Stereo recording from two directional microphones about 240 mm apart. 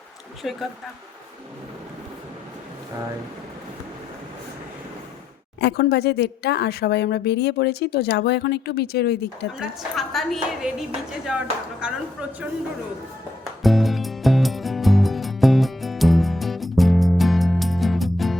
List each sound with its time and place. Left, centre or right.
0.4 s a woman's voice: centre
5.5 s speech: left
9.6 s a woman's voice: centre
13.6 s music: centre